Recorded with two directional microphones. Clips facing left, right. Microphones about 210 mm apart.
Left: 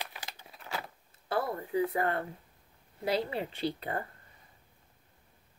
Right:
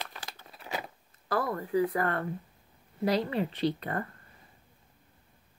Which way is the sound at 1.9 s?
25° left (ahead or behind).